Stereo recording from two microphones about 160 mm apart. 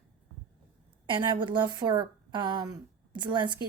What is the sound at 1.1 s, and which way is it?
A woman's voice, 30° right (ahead or behind).